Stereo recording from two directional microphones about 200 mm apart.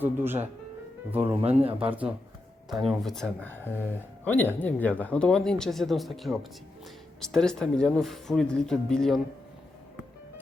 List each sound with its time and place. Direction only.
0.0 s speech: 10° right (ahead or behind)
1.5 s speech: 30° right (ahead or behind)
1.9 s speech: 5° right (ahead or behind)